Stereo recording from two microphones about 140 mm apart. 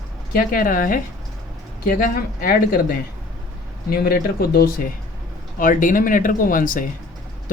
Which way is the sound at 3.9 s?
90° left.